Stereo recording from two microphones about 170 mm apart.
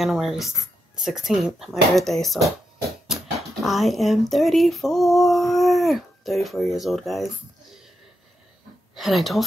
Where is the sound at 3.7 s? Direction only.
Centre (ahead or behind).